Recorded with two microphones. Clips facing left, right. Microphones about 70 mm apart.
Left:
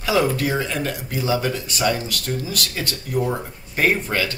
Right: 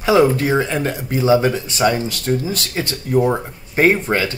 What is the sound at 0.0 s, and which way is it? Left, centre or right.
Speech, right.